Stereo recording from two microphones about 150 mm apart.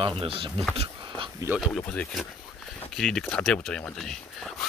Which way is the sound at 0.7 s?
45° right (ahead or behind).